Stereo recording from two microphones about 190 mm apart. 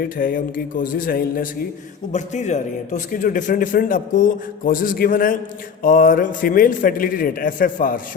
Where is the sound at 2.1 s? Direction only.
40° left (ahead or behind).